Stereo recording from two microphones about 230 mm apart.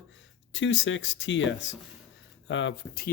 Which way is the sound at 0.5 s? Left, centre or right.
Left.